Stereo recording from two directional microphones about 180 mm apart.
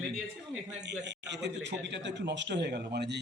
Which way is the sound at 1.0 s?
75° right (ahead or behind).